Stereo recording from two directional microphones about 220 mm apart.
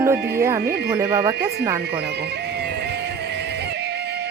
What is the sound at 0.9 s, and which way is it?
Speech, 15° right (ahead or behind).